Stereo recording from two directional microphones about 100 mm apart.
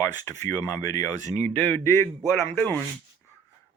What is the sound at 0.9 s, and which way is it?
Speech, 35° left (ahead or behind).